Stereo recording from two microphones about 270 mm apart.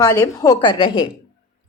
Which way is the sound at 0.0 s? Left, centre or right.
Centre.